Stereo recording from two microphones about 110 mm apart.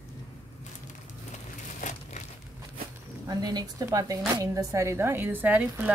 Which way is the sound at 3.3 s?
35° right (ahead or behind).